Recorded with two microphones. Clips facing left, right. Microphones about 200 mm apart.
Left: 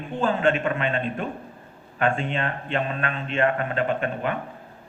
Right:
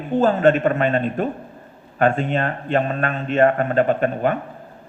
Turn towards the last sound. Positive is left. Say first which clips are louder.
# right 6 dB
turn(degrees=-45)  # may be behind; listen again after turning